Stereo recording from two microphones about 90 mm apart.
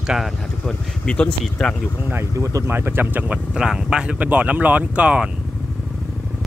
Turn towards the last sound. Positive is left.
turn(degrees=-15)  # may be behind; listen again after turning